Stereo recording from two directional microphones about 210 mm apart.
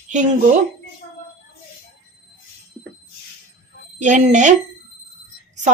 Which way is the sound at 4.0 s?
35° right (ahead or behind).